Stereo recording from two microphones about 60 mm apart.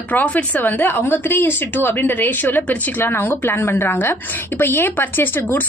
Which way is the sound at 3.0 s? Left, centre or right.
Left.